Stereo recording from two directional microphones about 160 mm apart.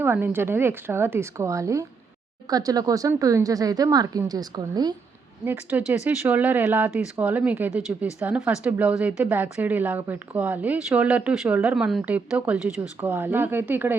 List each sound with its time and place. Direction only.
0.0 s speech: 15° right (ahead or behind)
5.5 s speech: 10° right (ahead or behind)